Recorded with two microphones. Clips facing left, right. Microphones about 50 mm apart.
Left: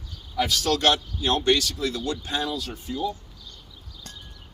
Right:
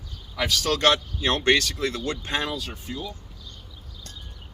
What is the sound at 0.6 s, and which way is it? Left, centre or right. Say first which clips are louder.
Speech: right 2 dB; right.